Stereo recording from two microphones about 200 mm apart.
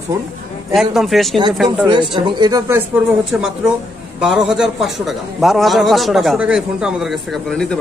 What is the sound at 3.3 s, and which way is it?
A man's voice, 5° right (ahead or behind).